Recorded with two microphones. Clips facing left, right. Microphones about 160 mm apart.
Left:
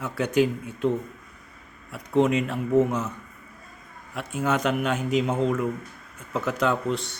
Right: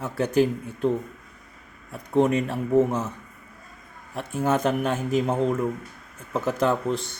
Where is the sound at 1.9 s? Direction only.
45° right (ahead or behind).